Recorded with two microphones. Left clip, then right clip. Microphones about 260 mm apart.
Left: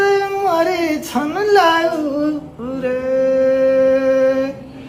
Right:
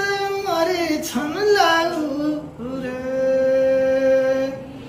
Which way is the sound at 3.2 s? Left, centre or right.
Left.